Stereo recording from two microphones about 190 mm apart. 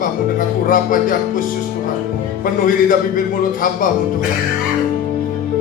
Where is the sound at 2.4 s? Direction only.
45° left (ahead or behind).